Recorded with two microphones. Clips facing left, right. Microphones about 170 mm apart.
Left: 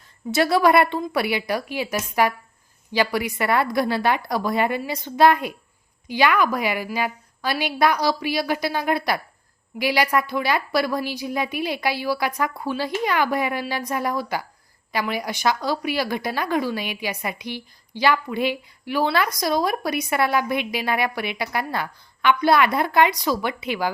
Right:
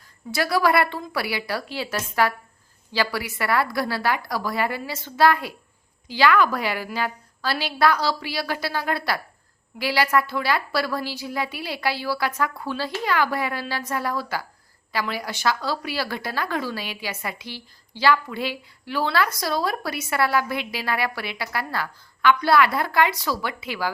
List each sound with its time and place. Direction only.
0.3 s a woman's voice: 25° left (ahead or behind)